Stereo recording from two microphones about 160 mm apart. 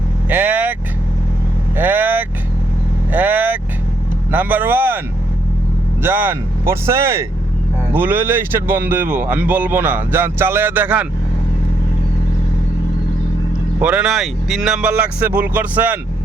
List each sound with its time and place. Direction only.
0.3 s vehicle: 10° right (ahead or behind)
4.3 s a man's voice: 10° right (ahead or behind)
6.0 s a man's voice: 15° right (ahead or behind)
13.7 s a man's voice: 10° right (ahead or behind)